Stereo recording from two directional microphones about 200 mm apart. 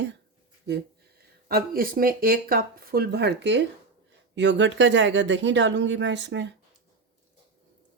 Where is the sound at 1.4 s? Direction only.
50° right (ahead or behind).